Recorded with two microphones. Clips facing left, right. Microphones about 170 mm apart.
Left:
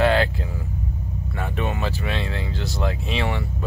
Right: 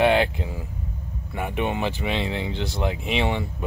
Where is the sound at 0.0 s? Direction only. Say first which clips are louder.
Even; 15° right (ahead or behind).